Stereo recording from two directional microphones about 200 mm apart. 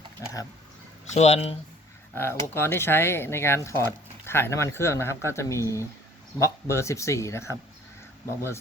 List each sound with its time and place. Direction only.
1.1 s speech: 30° left (ahead or behind)
2.1 s speech: 10° left (ahead or behind)